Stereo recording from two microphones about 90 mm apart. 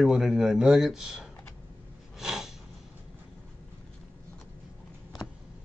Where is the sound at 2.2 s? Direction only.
5° right (ahead or behind).